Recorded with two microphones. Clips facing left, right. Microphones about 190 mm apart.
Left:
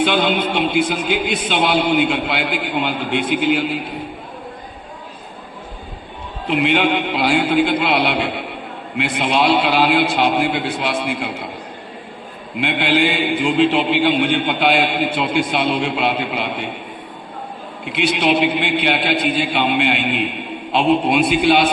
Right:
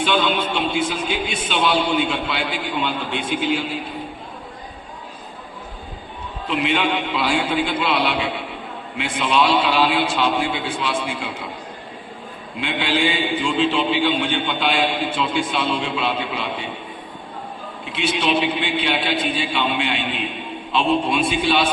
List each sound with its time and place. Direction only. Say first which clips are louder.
0.1 s speech: left 3 dB; 55° left (ahead or behind)
6.5 s speech: left 4 dB; 60° left (ahead or behind)
12.5 s speech: left 5 dB; 65° left (ahead or behind)
17.8 s speech: left 4 dB; 65° left (ahead or behind)